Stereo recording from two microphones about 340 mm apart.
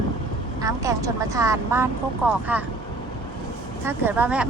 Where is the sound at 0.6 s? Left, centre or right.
Centre.